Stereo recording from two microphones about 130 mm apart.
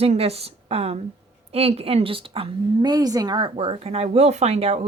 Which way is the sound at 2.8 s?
30° right (ahead or behind).